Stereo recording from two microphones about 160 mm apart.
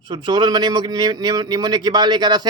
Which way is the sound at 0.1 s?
30° right (ahead or behind).